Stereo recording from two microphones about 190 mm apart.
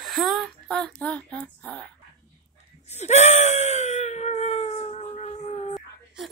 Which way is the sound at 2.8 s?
35° left (ahead or behind).